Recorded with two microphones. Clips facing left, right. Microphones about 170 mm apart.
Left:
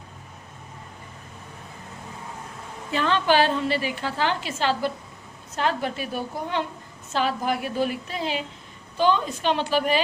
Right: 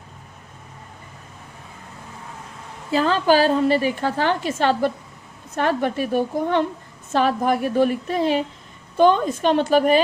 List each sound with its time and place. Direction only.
2.9 s a woman's voice: 35° right (ahead or behind); by 6.1 s 50° right (ahead or behind)
7.1 s a woman's voice: 50° right (ahead or behind)